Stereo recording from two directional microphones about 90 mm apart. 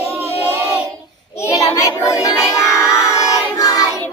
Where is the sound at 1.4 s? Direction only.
30° left (ahead or behind).